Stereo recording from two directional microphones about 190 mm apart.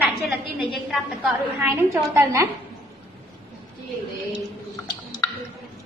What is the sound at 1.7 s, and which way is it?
Speech, 15° right (ahead or behind).